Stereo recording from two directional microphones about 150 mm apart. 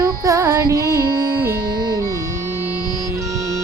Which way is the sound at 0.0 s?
20° right (ahead or behind).